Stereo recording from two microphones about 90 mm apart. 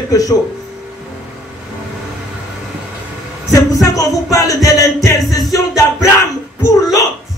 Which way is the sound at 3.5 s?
40° left (ahead or behind).